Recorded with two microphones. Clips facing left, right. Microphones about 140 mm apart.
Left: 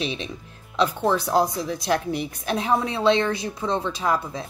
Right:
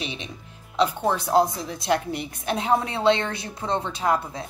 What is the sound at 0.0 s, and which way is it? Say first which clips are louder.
A woman's voice: left 5 dB; 15° right (ahead or behind).